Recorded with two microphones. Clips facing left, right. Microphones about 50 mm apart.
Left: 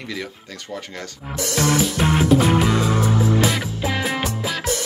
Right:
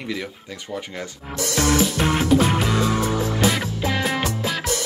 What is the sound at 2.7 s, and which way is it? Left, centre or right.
Music, centre.